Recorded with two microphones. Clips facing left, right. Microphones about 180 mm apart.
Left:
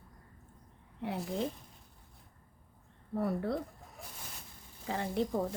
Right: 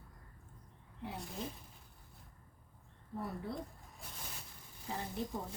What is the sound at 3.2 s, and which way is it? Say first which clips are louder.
Speech: left 9 dB; 65° left (ahead or behind).